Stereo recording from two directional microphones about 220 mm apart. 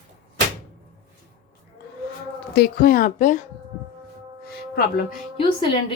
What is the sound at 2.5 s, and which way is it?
Speech, 45° left (ahead or behind).